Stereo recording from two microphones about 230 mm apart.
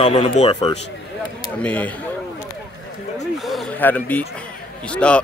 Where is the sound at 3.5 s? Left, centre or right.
Centre.